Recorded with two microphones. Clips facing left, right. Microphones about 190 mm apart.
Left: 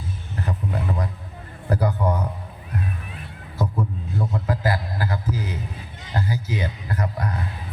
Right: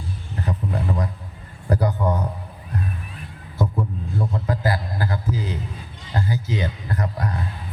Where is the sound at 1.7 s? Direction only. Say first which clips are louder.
Right 1 dB; 20° right (ahead or behind).